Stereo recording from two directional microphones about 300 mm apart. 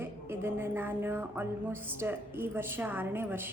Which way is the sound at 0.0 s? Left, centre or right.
Centre.